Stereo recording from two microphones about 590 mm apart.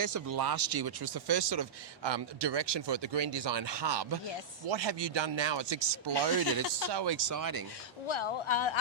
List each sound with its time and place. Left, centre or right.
0.0 s speech: right
8.0 s speech: left